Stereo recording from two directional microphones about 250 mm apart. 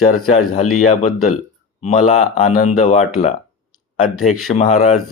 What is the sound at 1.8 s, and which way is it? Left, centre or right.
A man's voice, left.